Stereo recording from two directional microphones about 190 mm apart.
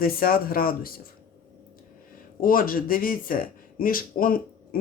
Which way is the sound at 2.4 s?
50° left (ahead or behind).